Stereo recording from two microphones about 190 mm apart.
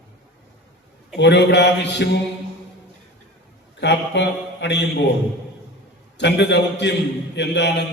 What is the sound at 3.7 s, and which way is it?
Speech, 65° left (ahead or behind).